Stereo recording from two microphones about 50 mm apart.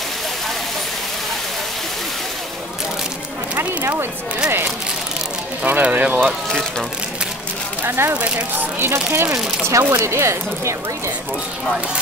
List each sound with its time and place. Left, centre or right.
3.5 s a sound: right
5.7 s speech: right
7.8 s speech: right
8.1 s speech: right
8.8 s speech: right
9.7 s speech: right